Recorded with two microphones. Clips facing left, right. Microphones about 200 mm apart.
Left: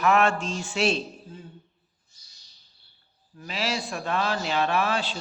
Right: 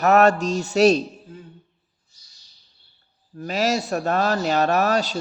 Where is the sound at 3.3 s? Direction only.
45° right (ahead or behind).